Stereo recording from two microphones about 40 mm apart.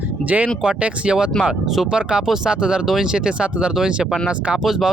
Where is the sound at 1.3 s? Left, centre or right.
Centre.